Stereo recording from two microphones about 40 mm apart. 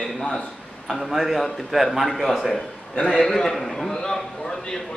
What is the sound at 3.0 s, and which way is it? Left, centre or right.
Speech, centre.